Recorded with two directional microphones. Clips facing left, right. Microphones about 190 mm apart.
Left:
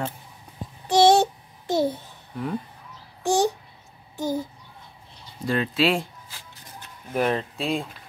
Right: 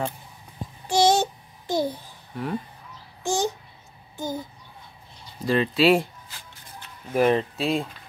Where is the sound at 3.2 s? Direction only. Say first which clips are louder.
Left 4 dB; 70° left (ahead or behind).